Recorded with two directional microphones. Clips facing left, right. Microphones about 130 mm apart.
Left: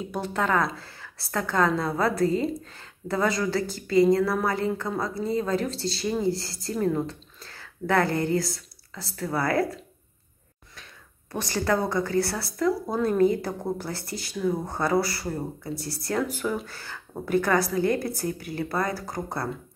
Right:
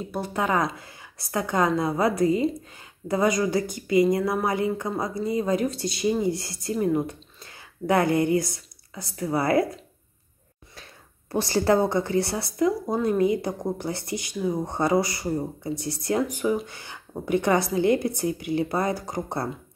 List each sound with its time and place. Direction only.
0.0 s speech: 10° right (ahead or behind)
11.3 s speech: 30° right (ahead or behind)